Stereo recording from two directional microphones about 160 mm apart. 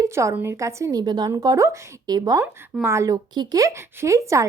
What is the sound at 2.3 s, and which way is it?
Speech, 15° right (ahead or behind).